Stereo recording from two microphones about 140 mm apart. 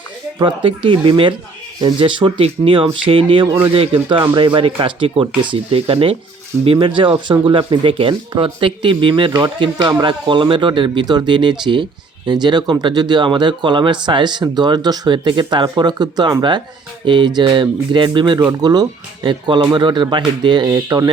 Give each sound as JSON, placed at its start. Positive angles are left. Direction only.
{"t": 0.3, "sound": "speech", "side_deg": -35}